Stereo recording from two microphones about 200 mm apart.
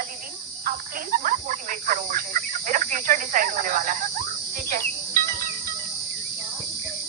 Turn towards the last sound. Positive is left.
turn(degrees=-45)  # may be behind; listen again after turning